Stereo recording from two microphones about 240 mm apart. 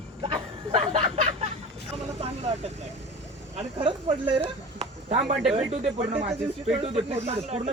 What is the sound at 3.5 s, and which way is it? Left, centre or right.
Speech, right.